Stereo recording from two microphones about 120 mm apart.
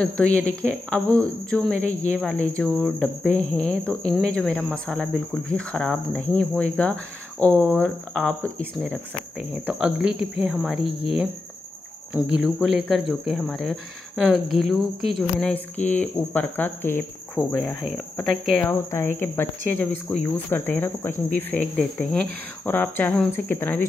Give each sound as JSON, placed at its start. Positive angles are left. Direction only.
{"t": 0.0, "sound": "speech", "side_deg": 10}
{"t": 9.7, "sound": "speech", "side_deg": -10}
{"t": 15.5, "sound": "speech", "side_deg": 15}
{"t": 17.6, "sound": "speech", "side_deg": 0}
{"t": 18.6, "sound": "speech", "side_deg": 20}